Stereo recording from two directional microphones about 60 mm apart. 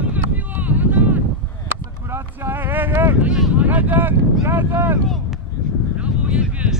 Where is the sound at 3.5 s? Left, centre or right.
Right.